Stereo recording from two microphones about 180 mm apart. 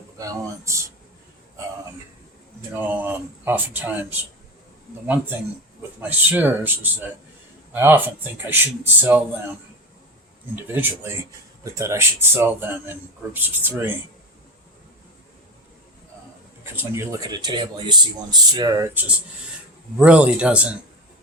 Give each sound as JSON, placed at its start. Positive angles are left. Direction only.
{"t": 0.2, "sound": "speech", "side_deg": -15}
{"t": 2.7, "sound": "speech", "side_deg": -10}
{"t": 6.0, "sound": "speech", "side_deg": -10}
{"t": 10.5, "sound": "speech", "side_deg": -10}
{"t": 16.7, "sound": "speech", "side_deg": -15}
{"t": 20.0, "sound": "speech", "side_deg": -5}